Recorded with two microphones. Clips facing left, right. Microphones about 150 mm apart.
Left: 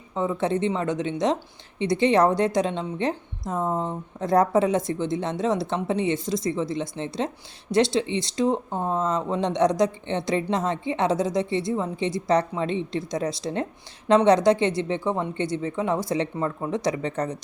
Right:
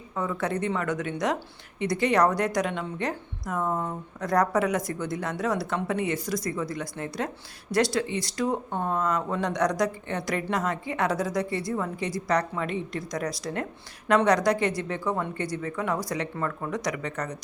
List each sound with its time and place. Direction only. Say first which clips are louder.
0.1 s a woman's voice: left 4 dB; 25° left (ahead or behind)